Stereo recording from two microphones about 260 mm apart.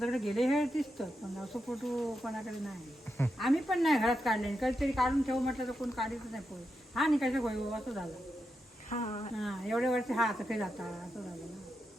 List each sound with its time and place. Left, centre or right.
0.0 s speech: centre
8.9 s speech: left
9.4 s speech: centre